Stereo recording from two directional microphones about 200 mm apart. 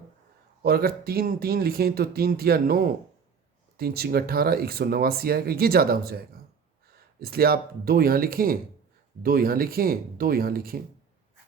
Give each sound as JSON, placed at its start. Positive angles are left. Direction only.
{"t": 0.6, "sound": "speech", "side_deg": -50}